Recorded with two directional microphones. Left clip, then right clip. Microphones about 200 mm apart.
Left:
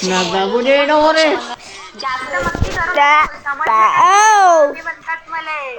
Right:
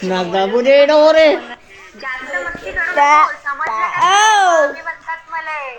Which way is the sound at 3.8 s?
25° left (ahead or behind).